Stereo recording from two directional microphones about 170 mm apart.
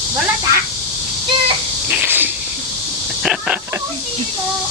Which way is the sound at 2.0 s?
10° right (ahead or behind).